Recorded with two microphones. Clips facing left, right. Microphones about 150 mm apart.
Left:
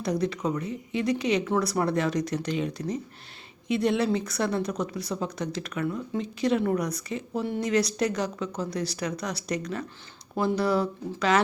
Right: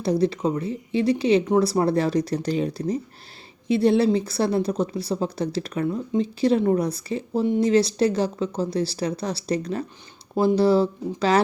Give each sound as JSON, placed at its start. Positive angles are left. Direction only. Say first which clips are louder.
{"t": 0.0, "sound": "speech", "louder": "right 5 dB", "side_deg": -30}